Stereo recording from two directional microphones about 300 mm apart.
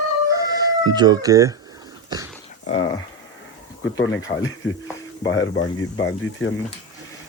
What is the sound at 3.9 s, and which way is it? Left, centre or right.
Speech, left.